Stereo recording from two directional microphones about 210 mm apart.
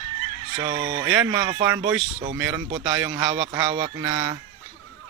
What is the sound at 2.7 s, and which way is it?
Speech, 20° right (ahead or behind).